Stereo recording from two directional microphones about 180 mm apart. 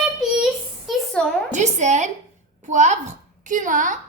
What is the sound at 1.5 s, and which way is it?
A woman's voice, 40° right (ahead or behind).